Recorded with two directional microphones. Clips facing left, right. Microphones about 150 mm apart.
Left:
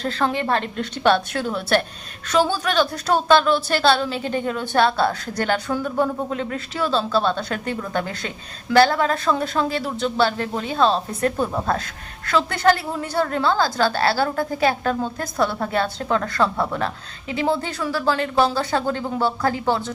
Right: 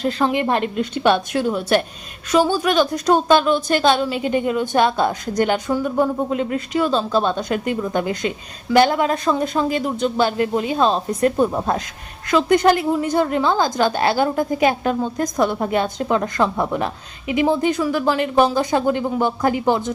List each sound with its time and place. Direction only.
0.0 s a woman's voice: 10° right (ahead or behind)